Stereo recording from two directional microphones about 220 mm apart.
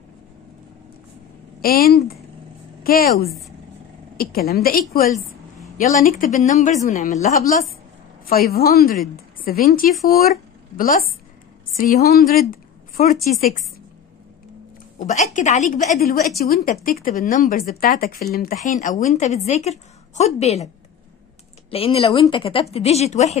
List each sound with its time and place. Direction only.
1.6 s a woman's voice: 45° left (ahead or behind)
8.5 s a woman's voice: 45° left (ahead or behind)
15.0 s speech: 35° left (ahead or behind)